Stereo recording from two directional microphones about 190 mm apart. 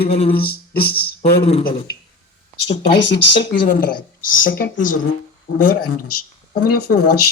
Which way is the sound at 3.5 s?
45° left (ahead or behind).